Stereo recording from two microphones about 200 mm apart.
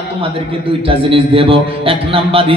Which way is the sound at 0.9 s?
25° right (ahead or behind).